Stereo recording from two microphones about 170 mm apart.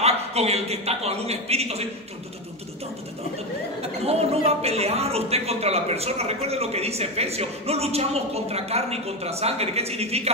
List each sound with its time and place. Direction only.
0.0 s a woman's voice: 35° right (ahead or behind)
4.0 s a woman's voice: 35° right (ahead or behind)